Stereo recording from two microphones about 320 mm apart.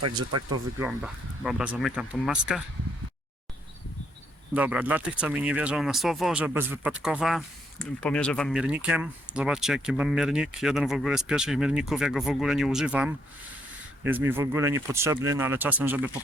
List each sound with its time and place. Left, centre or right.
0.0 s speech: right
0.8 s speech: centre
4.5 s speech: centre